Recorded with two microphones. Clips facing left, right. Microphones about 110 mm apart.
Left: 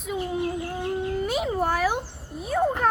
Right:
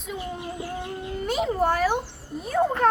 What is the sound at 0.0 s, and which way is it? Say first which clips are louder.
Bird: left 5 dB; centre (ahead or behind).